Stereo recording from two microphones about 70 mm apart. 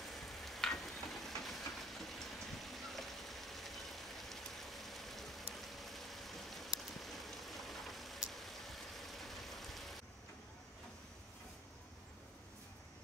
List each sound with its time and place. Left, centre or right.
0.0 s train: centre
6.8 s rain: centre